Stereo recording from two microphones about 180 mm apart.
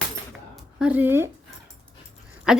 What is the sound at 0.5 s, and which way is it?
Speech, 5° right (ahead or behind).